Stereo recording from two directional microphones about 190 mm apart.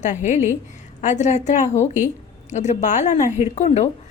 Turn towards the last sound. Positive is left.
turn(degrees=35)  # may be behind; listen again after turning